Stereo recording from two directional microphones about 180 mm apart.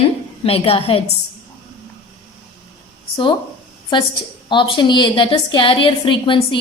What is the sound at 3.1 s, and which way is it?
A woman's voice, 25° left (ahead or behind).